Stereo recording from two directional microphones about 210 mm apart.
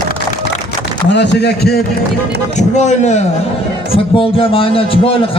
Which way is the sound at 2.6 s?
35° left (ahead or behind).